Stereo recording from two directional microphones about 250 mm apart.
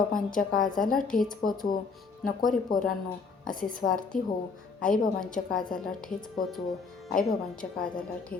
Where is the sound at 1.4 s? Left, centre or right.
Left.